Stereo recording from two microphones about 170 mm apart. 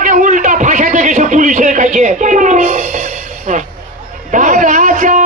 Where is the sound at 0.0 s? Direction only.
50° right (ahead or behind).